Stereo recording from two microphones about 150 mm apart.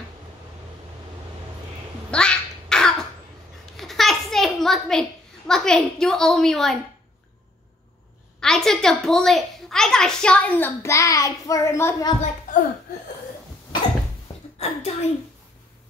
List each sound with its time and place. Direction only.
2.0 s a sound: 5° left (ahead or behind)
5.5 s a woman's voice: 5° left (ahead or behind)
8.4 s a child's voice: 5° left (ahead or behind); by 12.2 s 20° left (ahead or behind)
14.6 s a child's voice: 45° left (ahead or behind)